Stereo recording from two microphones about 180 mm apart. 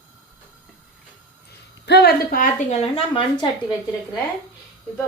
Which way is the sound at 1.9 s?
60° left (ahead or behind).